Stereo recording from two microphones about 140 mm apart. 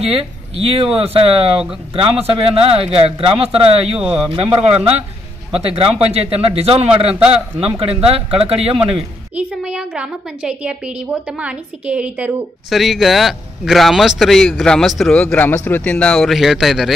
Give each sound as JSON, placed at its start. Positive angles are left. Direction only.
{"t": 0.0, "sound": "speech", "side_deg": -45}
{"t": 9.3, "sound": "a woman's voice", "side_deg": -5}